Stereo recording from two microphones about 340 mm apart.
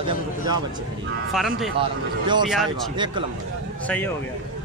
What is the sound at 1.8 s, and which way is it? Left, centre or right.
Speech, centre.